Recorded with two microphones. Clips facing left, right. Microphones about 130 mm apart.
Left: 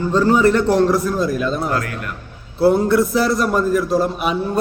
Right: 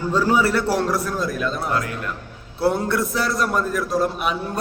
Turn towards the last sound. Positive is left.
turn(degrees=0)  # may be behind; listen again after turning